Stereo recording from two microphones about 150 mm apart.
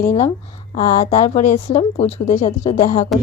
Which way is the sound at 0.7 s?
55° left (ahead or behind).